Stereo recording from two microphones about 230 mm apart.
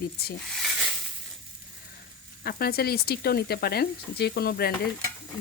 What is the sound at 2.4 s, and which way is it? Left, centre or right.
Speech, left.